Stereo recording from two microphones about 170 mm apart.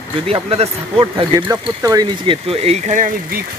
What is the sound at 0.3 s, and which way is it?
Speech, 35° right (ahead or behind).